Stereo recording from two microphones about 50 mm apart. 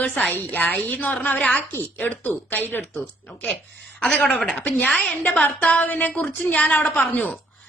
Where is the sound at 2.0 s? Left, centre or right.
Left.